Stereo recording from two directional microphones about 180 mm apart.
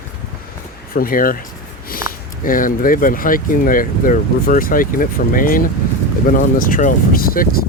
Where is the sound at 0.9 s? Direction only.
50° left (ahead or behind).